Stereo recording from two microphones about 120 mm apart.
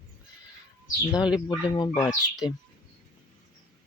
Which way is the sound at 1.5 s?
35° left (ahead or behind).